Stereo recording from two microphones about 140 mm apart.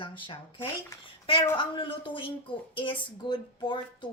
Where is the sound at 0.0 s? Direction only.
35° left (ahead or behind).